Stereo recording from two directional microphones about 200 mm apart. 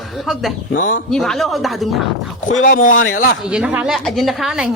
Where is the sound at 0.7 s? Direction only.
40° left (ahead or behind).